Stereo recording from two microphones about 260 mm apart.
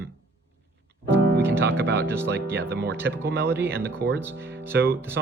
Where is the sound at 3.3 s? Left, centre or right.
Right.